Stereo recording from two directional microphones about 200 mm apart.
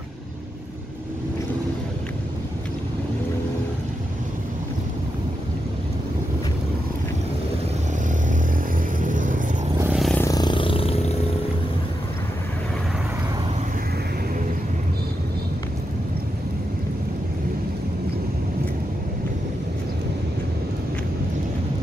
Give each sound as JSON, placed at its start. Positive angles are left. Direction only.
{"t": 9.0, "sound": "music", "side_deg": -40}
{"t": 9.8, "sound": "vehicle", "side_deg": -5}
{"t": 10.1, "sound": "roar", "side_deg": 15}